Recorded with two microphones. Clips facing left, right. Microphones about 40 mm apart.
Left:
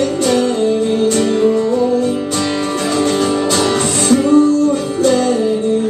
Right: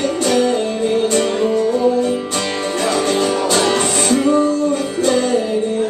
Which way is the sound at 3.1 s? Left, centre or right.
Centre.